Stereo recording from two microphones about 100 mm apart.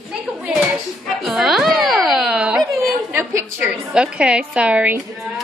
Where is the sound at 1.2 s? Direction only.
5° right (ahead or behind).